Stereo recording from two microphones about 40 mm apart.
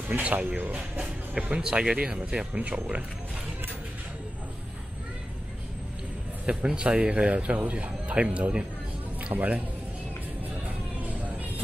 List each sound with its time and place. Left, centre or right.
0.2 s speech: right
1.8 s speech: right
6.4 s a man's voice: right